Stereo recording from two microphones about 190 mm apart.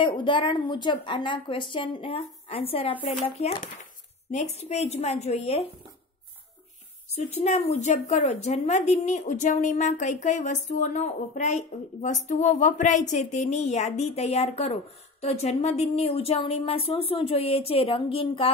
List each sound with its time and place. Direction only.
0.0 s a woman's voice: 25° left (ahead or behind)
7.2 s a woman's voice: 35° left (ahead or behind)